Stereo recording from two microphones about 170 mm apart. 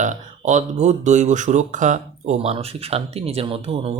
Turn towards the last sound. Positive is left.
turn(degrees=-35)  # may be behind; listen again after turning